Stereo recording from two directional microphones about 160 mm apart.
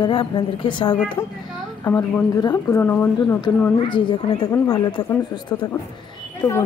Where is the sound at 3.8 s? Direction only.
30° left (ahead or behind).